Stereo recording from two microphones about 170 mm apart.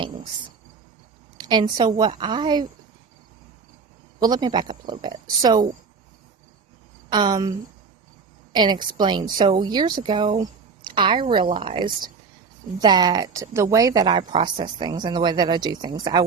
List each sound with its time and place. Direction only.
1.4 s a woman's voice: 25° right (ahead or behind)
4.2 s a woman's voice: 25° right (ahead or behind)
7.1 s a woman's voice: 25° right (ahead or behind)
8.5 s a woman's voice: 25° right (ahead or behind)